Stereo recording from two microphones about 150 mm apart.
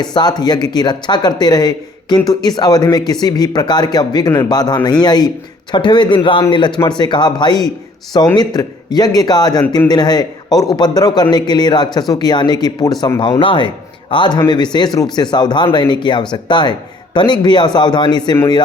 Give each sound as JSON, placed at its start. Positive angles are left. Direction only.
{"t": 0.0, "sound": "speech", "side_deg": 30}